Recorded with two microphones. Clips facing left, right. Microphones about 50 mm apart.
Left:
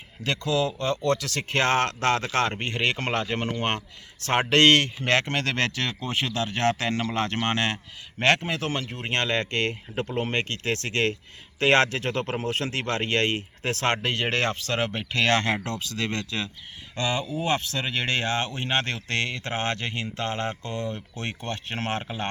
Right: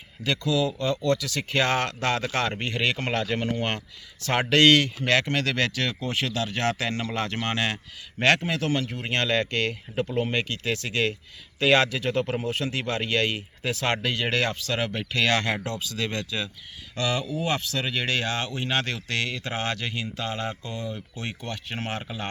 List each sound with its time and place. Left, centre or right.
0.3 s speech: left
10.2 s speech: left
14.8 s speech: left
16.9 s speech: left
17.7 s speech: centre; by 22.0 s left
22.0 s speech: left